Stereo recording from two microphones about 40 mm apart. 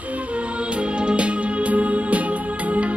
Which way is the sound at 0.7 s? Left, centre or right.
Right.